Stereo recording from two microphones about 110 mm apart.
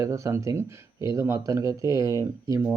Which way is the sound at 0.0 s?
30° right (ahead or behind).